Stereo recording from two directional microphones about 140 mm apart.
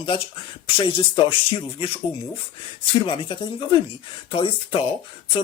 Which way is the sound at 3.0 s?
35° left (ahead or behind).